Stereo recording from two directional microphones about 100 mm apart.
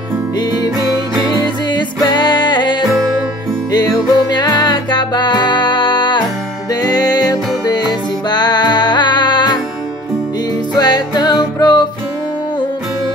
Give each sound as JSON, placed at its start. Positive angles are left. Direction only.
{"t": 2.1, "sound": "music", "side_deg": 45}
{"t": 10.7, "sound": "music", "side_deg": 45}